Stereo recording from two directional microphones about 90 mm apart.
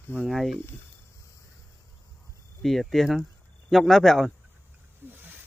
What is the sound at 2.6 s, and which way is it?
Speech, centre (ahead or behind).